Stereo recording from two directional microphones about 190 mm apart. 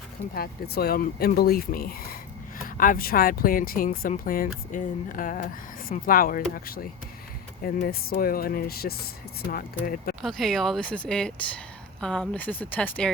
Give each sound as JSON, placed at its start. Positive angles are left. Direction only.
{"t": 0.3, "sound": "speech", "side_deg": 55}
{"t": 10.2, "sound": "speech", "side_deg": 0}